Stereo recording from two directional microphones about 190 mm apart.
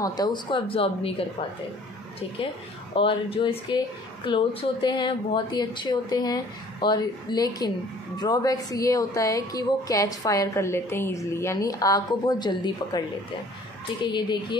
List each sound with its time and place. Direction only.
0.0 s a woman's voice: 20° left (ahead or behind)
2.9 s a woman's voice: 30° left (ahead or behind)
14.0 s a woman's voice: 25° left (ahead or behind)